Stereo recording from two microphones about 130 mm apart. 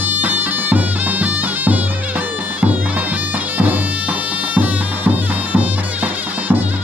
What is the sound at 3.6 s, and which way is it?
Music, 10° right (ahead or behind).